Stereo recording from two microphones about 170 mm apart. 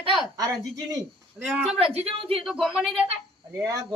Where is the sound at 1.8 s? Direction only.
35° right (ahead or behind).